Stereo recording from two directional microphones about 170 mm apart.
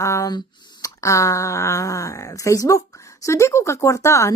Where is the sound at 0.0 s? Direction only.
20° left (ahead or behind).